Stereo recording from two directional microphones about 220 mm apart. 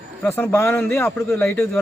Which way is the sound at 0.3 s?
10° left (ahead or behind).